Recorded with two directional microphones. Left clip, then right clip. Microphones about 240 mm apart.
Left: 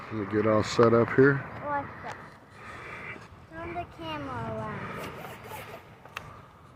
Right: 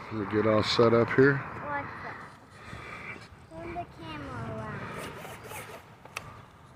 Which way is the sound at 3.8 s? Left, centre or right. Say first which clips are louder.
Left 5 dB; left.